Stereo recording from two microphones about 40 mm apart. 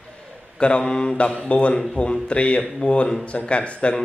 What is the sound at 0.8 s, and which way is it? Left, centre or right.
Speech, centre.